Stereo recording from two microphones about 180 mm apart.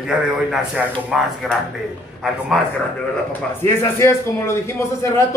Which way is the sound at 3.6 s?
15° left (ahead or behind).